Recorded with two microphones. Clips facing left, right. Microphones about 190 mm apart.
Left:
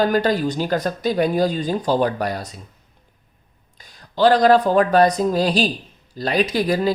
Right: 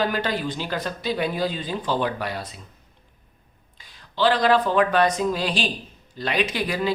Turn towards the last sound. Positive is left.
turn(degrees=40)  # may be behind; listen again after turning